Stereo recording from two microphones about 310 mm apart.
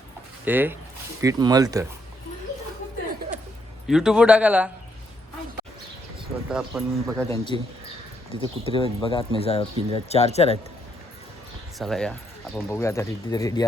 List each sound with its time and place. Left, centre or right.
0.4 s speech: centre
3.8 s a man's voice: centre
6.5 s a man's voice: centre
7.5 s speech: centre
11.8 s a man's voice: centre